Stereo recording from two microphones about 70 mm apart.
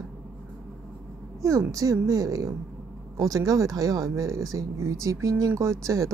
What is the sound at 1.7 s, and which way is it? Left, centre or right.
A woman's voice, right.